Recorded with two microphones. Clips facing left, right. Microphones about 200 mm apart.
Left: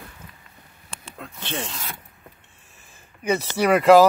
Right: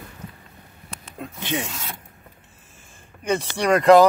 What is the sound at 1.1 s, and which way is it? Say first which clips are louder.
Speech: right 4 dB; 15° right (ahead or behind).